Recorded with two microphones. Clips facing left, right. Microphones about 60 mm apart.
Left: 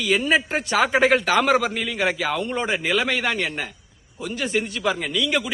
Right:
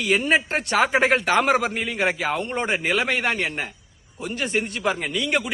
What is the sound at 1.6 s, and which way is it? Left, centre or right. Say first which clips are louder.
A man's voice: even; right.